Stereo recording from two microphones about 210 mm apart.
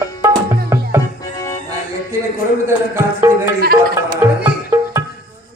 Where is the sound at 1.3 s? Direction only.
15° left (ahead or behind).